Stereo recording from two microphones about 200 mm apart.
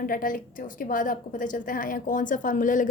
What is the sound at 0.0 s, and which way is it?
A woman's voice, 45° left (ahead or behind).